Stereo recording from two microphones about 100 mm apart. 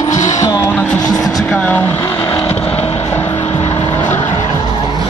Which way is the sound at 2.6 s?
75° left (ahead or behind).